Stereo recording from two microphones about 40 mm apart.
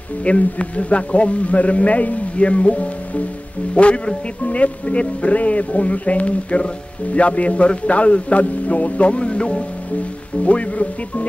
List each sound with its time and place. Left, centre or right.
0.2 s speech: left